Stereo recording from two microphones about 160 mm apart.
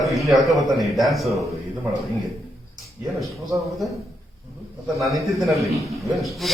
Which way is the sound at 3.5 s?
20° right (ahead or behind).